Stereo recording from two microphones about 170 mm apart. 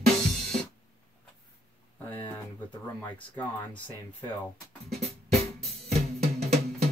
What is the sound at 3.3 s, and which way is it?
Speech, 10° left (ahead or behind).